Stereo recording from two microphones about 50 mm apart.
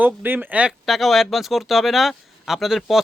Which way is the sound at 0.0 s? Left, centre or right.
Right.